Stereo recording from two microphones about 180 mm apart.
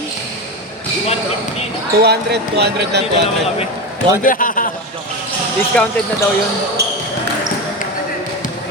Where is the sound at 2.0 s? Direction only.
65° right (ahead or behind).